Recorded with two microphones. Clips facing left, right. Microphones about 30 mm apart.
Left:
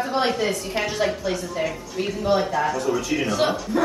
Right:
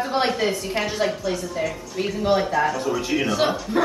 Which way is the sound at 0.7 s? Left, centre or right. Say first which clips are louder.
Even; centre.